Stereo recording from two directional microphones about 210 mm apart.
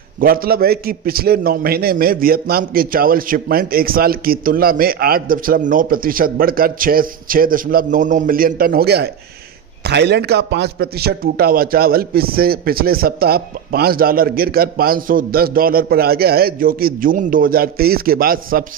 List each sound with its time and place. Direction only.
0.2 s a man's voice: 45° right (ahead or behind)